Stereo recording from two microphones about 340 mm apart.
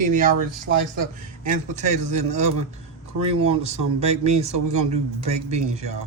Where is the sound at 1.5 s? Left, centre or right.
Right.